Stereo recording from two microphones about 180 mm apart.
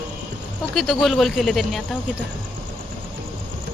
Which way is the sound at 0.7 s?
Centre (ahead or behind).